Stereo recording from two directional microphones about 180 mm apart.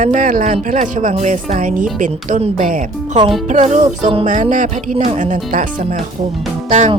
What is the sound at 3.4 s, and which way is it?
Music, 40° right (ahead or behind).